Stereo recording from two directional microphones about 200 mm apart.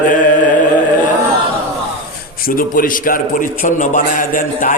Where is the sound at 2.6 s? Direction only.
45° left (ahead or behind).